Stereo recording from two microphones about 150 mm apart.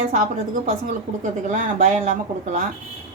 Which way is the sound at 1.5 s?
55° right (ahead or behind).